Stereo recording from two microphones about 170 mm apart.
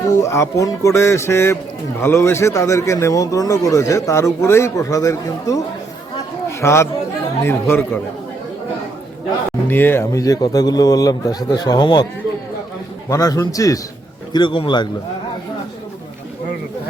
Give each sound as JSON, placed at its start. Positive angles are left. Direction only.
{"t": 0.2, "sound": "speech", "side_deg": 20}
{"t": 6.6, "sound": "speech", "side_deg": 15}
{"t": 9.6, "sound": "a man's voice", "side_deg": 10}
{"t": 13.1, "sound": "a man's voice", "side_deg": 20}